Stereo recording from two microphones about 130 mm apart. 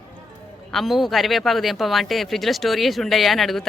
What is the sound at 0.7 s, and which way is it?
Speech, centre (ahead or behind).